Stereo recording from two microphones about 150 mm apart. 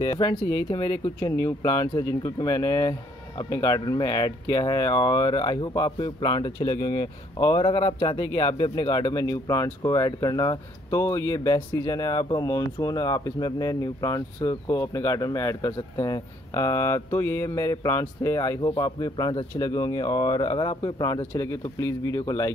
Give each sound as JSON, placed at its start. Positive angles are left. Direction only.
{"t": 0.0, "sound": "speech", "side_deg": 25}
{"t": 7.7, "sound": "speech", "side_deg": 35}